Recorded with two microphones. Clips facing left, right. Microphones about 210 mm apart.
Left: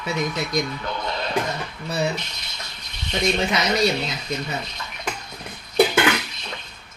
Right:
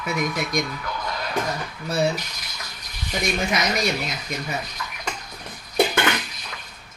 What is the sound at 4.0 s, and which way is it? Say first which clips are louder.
Speech: left 2 dB; 25° left (ahead or behind).